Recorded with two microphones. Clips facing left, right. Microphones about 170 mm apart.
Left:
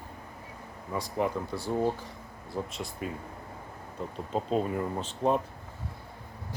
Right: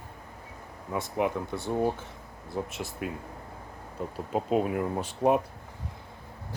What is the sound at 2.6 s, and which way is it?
Speech, 5° right (ahead or behind).